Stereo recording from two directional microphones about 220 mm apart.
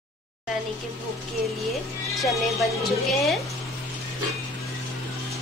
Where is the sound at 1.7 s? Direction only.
Centre (ahead or behind).